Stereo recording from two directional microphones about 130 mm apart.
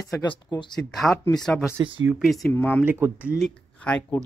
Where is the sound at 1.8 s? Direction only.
40° right (ahead or behind).